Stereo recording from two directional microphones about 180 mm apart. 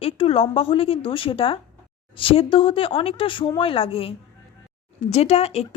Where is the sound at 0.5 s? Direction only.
30° left (ahead or behind).